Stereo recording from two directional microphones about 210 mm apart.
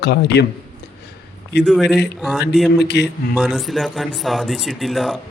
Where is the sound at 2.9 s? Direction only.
55° left (ahead or behind).